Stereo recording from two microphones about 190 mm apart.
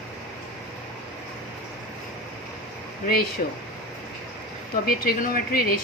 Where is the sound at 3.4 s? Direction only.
45° left (ahead or behind).